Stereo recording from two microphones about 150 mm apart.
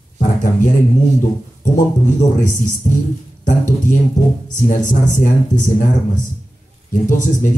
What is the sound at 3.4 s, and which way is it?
Speech, 60° left (ahead or behind).